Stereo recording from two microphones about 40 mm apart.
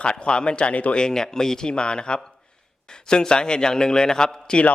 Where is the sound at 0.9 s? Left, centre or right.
Centre.